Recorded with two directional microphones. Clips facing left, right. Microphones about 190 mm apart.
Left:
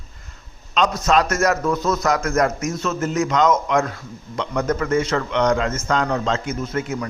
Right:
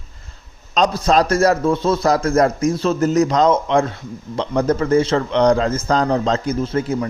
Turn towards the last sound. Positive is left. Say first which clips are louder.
# right 5 dB
turn(degrees=-30)  # may be behind; listen again after turning